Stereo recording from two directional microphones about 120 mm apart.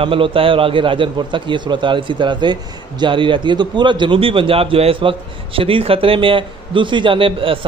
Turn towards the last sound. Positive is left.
turn(degrees=-50)  # may be behind; listen again after turning